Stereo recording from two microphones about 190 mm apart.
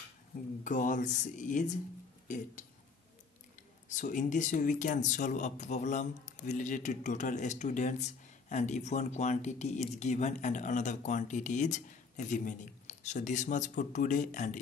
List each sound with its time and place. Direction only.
0.7 s speech: 40° left (ahead or behind)
3.9 s speech: 40° left (ahead or behind)